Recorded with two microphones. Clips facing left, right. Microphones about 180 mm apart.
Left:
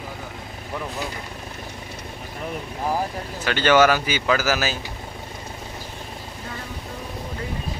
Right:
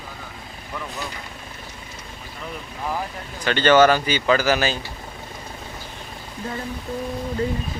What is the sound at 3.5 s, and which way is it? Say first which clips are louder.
Speech: right 2 dB; 10° left (ahead or behind).